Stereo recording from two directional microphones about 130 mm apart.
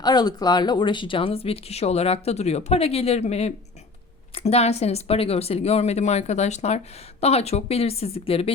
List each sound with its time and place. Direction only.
0.0 s speech: 30° left (ahead or behind); by 8.5 s 50° left (ahead or behind)